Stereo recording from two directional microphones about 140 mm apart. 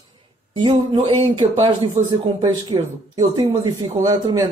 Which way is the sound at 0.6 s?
35° right (ahead or behind).